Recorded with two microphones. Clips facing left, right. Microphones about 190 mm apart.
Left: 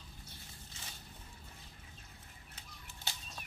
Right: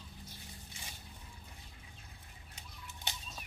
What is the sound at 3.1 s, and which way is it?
Bird flight, 20° right (ahead or behind).